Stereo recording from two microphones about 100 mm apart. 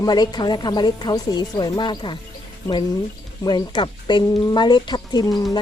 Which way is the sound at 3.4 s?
50° left (ahead or behind).